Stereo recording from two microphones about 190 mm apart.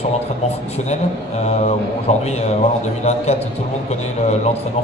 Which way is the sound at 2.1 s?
35° left (ahead or behind).